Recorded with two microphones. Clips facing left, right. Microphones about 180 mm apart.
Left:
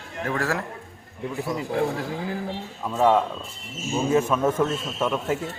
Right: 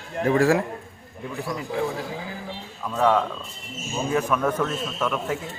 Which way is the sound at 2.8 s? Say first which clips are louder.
Left 1 dB; 20° left (ahead or behind).